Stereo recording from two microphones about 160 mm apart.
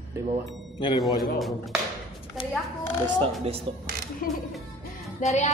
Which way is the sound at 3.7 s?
35° right (ahead or behind).